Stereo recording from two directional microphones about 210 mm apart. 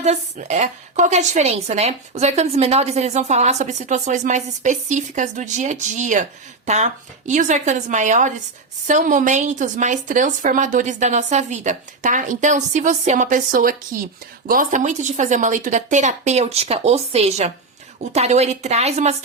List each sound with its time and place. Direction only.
0.0 s a woman's voice: 30° right (ahead or behind)